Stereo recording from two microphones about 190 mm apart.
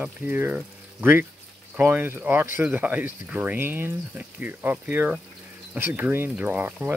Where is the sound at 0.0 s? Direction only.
10° right (ahead or behind).